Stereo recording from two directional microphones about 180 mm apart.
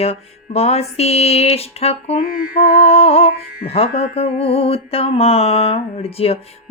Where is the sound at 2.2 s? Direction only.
55° left (ahead or behind).